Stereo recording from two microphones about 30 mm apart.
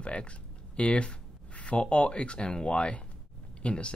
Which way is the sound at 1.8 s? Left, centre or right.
Left.